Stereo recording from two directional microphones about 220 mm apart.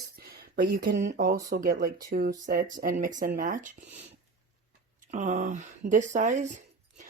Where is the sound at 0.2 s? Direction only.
45° right (ahead or behind).